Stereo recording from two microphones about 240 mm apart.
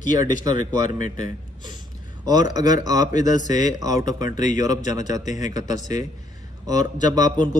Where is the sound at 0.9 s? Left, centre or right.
Left.